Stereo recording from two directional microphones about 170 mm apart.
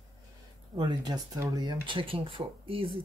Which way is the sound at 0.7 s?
25° right (ahead or behind).